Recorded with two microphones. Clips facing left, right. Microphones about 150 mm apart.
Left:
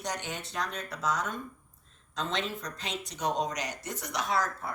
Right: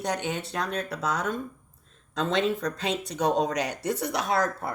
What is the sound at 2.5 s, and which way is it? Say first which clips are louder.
Speech: right 9 dB; 60° right (ahead or behind).